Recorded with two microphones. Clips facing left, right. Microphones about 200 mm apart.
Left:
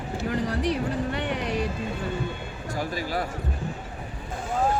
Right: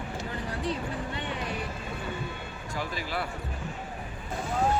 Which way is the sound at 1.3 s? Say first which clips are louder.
Left 5 dB; 20° left (ahead or behind).